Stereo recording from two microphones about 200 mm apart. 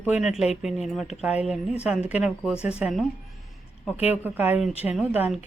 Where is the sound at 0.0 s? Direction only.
5° right (ahead or behind).